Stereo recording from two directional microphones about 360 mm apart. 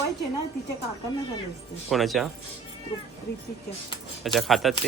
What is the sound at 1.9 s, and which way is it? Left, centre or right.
Speech, centre.